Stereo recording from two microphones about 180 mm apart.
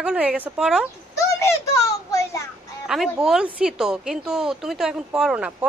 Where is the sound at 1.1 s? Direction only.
15° left (ahead or behind).